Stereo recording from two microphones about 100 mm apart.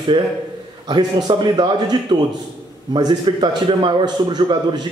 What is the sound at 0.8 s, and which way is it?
A man's voice, 45° right (ahead or behind).